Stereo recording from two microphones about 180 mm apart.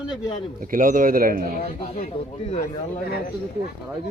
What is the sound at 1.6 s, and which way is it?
Speech, 35° left (ahead or behind).